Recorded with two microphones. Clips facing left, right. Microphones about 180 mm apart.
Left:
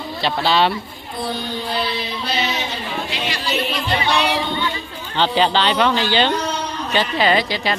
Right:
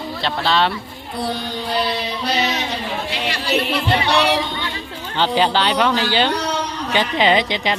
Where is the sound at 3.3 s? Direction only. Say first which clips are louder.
Right 4 dB; 65° right (ahead or behind).